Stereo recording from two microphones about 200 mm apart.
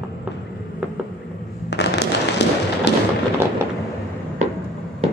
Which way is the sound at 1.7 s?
60° left (ahead or behind).